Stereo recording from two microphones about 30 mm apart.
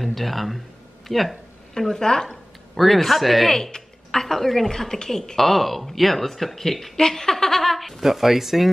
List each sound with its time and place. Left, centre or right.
0.0 s speech: centre
1.7 s a woman's voice: centre
2.7 s a man's voice: centre
3.5 s a woman's voice: centre
5.4 s speech: centre
7.7 s a man's voice: centre